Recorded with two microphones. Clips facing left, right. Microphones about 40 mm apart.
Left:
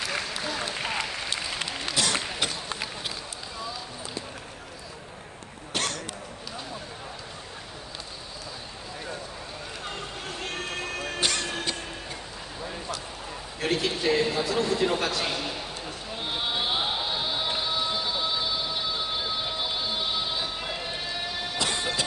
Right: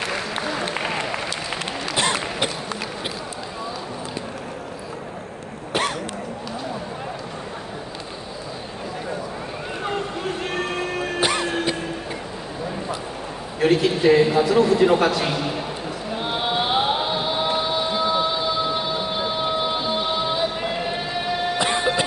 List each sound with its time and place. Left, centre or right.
0.0 s applause: right
2.0 s a sound: right
5.7 s cough: centre
9.8 s music: centre
13.6 s a man's voice: centre
16.2 s chant: centre
18.8 s music: right